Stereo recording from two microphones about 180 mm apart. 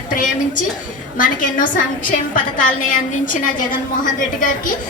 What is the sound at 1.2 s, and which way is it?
A woman's voice, 50° left (ahead or behind).